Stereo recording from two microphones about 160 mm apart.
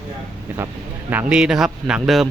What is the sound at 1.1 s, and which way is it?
A man's voice, 10° right (ahead or behind).